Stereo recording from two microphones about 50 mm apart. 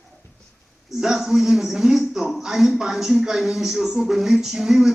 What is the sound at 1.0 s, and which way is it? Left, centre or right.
Speech, centre.